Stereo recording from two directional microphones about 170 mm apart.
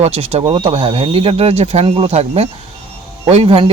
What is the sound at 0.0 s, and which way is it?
Speech, 35° right (ahead or behind).